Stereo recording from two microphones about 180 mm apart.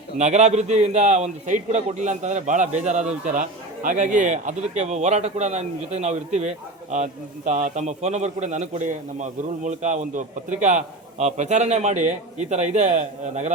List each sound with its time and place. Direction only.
0.2 s a man's voice: 40° right (ahead or behind)